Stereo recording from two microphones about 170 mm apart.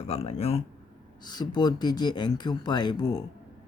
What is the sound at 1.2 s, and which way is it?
Speech, 25° left (ahead or behind).